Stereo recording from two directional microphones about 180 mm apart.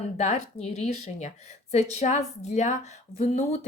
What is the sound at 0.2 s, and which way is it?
Speech, 40° left (ahead or behind).